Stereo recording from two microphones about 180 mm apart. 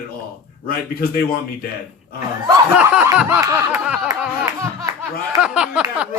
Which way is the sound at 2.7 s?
5° right (ahead or behind).